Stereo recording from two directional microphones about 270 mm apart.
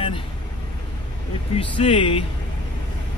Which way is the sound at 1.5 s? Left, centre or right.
Centre.